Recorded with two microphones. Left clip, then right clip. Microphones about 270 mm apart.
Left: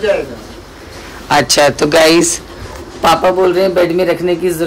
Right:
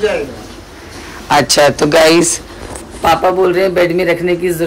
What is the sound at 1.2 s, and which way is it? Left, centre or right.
A man's voice, centre.